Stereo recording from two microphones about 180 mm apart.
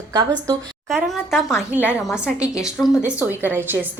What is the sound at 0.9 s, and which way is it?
A woman's voice, centre (ahead or behind).